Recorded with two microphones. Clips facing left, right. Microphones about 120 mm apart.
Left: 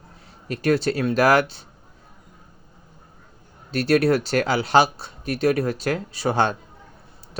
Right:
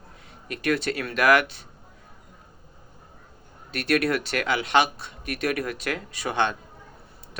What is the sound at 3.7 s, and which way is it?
Speech, 30° left (ahead or behind).